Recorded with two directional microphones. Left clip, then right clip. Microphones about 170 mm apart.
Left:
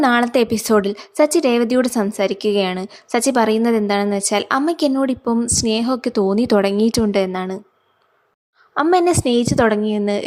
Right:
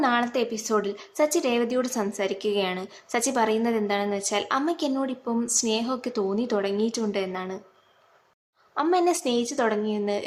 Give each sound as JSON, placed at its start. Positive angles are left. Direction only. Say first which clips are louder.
{"t": 0.0, "sound": "speech", "louder": "left 8 dB", "side_deg": 45}
{"t": 8.7, "sound": "a woman's voice", "louder": "left 8 dB", "side_deg": 45}